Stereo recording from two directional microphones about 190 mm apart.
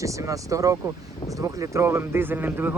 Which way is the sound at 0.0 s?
15° right (ahead or behind).